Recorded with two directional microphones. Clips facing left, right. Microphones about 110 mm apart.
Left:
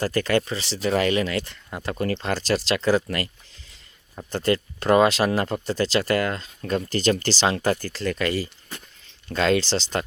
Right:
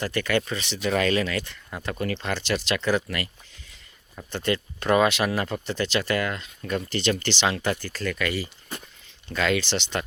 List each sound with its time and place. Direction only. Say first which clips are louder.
0.0 s speech: left 3 dB; 35° left (ahead or behind)
4.3 s speech: left 4 dB; 40° left (ahead or behind)
7.9 s speech: left 3 dB; 30° left (ahead or behind)